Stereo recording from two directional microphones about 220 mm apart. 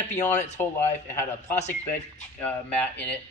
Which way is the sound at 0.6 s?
10° left (ahead or behind).